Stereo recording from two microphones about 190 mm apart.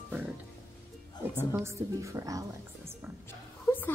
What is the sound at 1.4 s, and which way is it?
A woman's voice, 15° right (ahead or behind).